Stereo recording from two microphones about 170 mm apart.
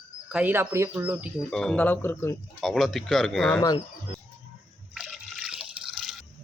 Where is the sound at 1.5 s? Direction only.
5° left (ahead or behind).